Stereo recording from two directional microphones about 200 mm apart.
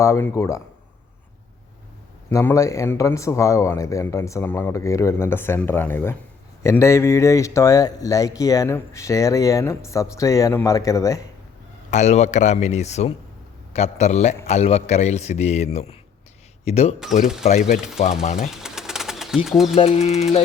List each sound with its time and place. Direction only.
0.0 s speech: 15° left (ahead or behind)
2.3 s speech: 15° left (ahead or behind)
11.9 s speech: 35° left (ahead or behind)
18.5 s bird: 5° right (ahead or behind)
19.6 s speech: 35° left (ahead or behind)